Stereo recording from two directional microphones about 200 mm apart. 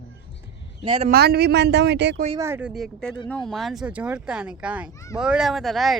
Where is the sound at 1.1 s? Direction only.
50° right (ahead or behind).